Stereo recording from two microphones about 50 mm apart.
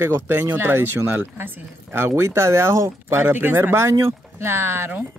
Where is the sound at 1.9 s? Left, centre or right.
Right.